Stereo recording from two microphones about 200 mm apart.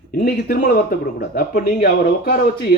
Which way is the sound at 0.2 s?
50° left (ahead or behind).